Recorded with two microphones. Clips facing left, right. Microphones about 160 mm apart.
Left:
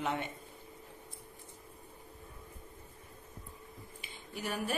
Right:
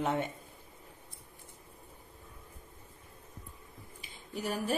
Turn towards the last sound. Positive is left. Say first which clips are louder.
# right 3 dB
turn(degrees=-40)  # may be behind; listen again after turning